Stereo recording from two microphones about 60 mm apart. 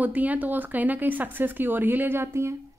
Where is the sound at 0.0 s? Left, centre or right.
Right.